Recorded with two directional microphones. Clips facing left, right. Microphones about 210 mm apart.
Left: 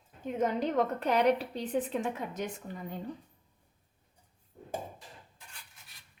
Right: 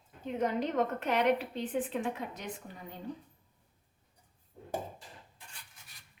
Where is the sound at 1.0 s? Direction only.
40° left (ahead or behind).